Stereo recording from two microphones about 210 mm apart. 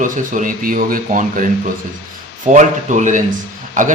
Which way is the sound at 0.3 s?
40° right (ahead or behind).